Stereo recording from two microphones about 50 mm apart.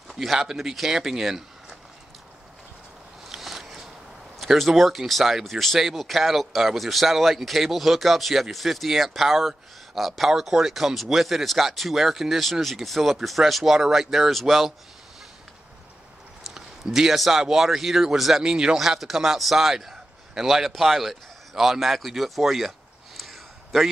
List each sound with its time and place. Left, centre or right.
0.1 s speech: centre
3.3 s a sound: centre
4.4 s speech: centre
16.4 s speech: centre
18.4 s speech: centre
18.8 s a man's voice: centre